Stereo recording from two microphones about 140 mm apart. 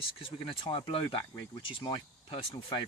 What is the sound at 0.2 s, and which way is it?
Speech, 40° left (ahead or behind).